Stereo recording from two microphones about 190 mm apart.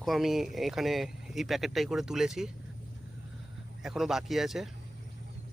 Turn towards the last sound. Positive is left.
turn(degrees=0)  # may be behind; listen again after turning